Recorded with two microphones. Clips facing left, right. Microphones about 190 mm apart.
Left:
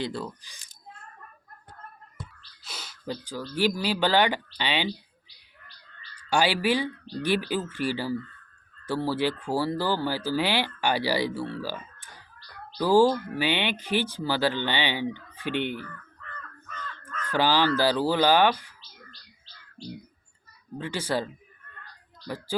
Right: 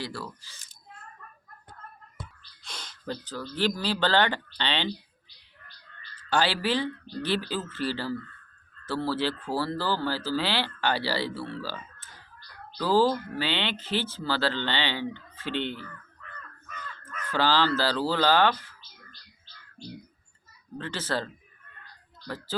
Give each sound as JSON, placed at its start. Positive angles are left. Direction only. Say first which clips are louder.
{"t": 0.0, "sound": "speech", "louder": "left 5 dB", "side_deg": 20}
{"t": 2.6, "sound": "speech", "louder": "left 1 dB", "side_deg": 5}
{"t": 6.3, "sound": "speech", "louder": "left 2 dB", "side_deg": 10}
{"t": 16.6, "sound": "crow", "louder": "left 2 dB", "side_deg": -10}
{"t": 17.3, "sound": "speech", "louder": "left 2 dB", "side_deg": 15}
{"t": 20.7, "sound": "speech", "louder": "left 3 dB", "side_deg": 10}